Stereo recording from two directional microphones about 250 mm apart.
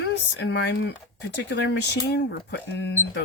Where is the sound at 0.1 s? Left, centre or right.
Left.